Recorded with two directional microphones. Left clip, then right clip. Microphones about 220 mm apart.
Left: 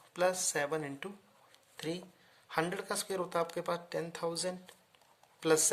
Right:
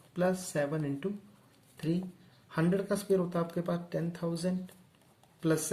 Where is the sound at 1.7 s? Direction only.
45° left (ahead or behind).